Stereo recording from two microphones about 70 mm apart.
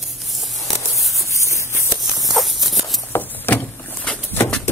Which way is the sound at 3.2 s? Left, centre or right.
Left.